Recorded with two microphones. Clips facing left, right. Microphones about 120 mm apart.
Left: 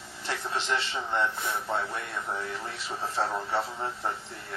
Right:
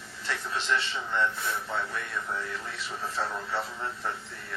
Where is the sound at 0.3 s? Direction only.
30° left (ahead or behind).